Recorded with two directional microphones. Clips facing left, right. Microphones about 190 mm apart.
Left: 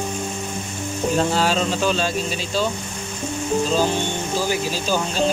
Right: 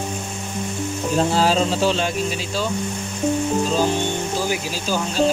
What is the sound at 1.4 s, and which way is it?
Speech, 35° right (ahead or behind).